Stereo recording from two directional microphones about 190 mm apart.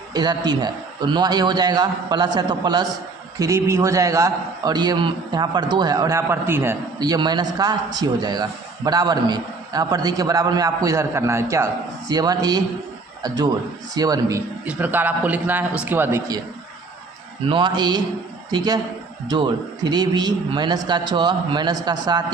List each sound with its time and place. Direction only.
0.1 s a man's voice: 20° right (ahead or behind)
17.5 s a man's voice: 25° right (ahead or behind)